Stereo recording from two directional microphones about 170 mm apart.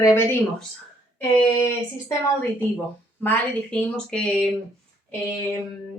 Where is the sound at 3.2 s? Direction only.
10° left (ahead or behind).